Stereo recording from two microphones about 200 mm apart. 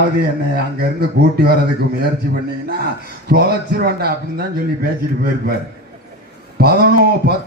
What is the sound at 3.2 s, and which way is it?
A man's voice, 50° right (ahead or behind).